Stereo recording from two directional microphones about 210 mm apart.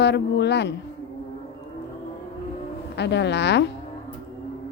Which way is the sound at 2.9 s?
55° left (ahead or behind).